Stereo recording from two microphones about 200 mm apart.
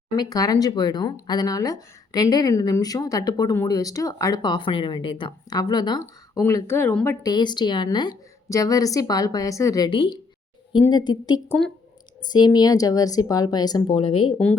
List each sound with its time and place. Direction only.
0.2 s speech: 20° left (ahead or behind)
11.4 s a woman's voice: centre (ahead or behind)
12.3 s speech: 20° left (ahead or behind)